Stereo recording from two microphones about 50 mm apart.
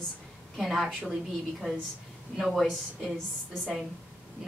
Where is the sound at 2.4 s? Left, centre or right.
Centre.